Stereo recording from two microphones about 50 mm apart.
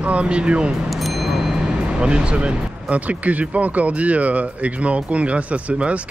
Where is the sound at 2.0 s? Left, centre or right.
Centre.